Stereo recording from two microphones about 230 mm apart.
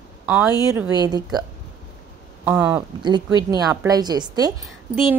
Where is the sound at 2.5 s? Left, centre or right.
Centre.